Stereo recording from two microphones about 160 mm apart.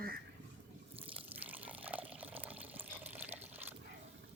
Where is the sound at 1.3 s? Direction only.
10° right (ahead or behind).